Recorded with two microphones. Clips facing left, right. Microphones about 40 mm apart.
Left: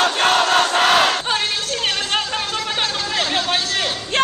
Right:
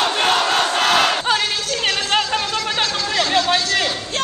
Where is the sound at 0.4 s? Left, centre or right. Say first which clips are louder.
Left 2 dB; centre.